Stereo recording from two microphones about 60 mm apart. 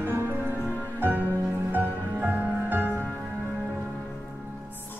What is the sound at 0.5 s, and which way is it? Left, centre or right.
Music, left.